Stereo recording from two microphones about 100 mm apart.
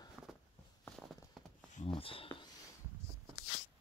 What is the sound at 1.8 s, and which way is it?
Speech, 65° left (ahead or behind).